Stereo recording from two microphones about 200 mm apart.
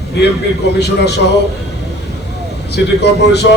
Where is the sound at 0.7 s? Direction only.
55° left (ahead or behind).